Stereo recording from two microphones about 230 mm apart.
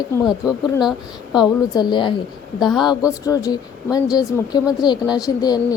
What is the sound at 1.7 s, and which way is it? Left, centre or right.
Speech, centre.